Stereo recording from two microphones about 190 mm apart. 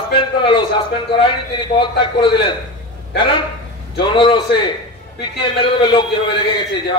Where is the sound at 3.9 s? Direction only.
25° left (ahead or behind).